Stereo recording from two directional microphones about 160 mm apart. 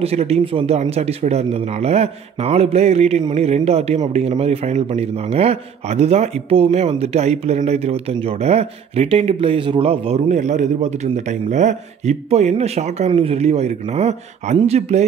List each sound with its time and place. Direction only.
0.0 s a man's voice: 40° right (ahead or behind)